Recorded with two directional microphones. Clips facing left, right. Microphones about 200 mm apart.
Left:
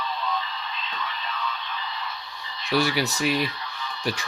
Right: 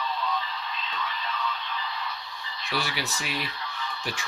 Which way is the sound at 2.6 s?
40° left (ahead or behind).